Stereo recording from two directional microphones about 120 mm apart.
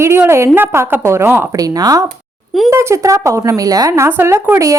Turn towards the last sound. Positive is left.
turn(degrees=-25)  # may be behind; listen again after turning